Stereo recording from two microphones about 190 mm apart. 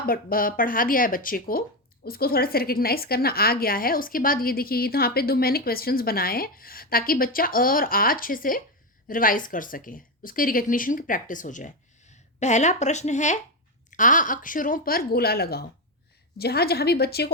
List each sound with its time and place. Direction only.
0.0 s a woman's voice: 50° left (ahead or behind)